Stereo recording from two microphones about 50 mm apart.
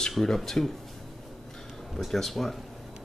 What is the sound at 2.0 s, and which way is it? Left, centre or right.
Speech, centre.